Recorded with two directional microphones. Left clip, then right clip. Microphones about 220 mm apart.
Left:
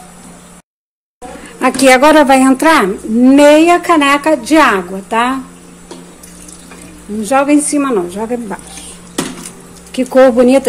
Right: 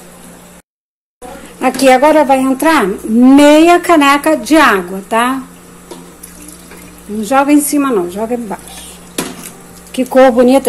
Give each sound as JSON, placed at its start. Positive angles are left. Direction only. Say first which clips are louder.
{"t": 1.6, "sound": "a woman's voice", "louder": "left 1 dB", "side_deg": 10}
{"t": 2.0, "sound": "a woman's voice", "louder": "left 1 dB", "side_deg": 20}
{"t": 3.2, "sound": "a woman's voice", "louder": "even", "side_deg": -5}
{"t": 7.2, "sound": "speech", "louder": "right 1 dB", "side_deg": 0}
{"t": 9.9, "sound": "speech", "louder": "even", "side_deg": 5}